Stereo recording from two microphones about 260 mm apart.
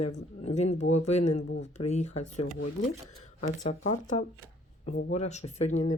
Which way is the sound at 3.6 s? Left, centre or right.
Left.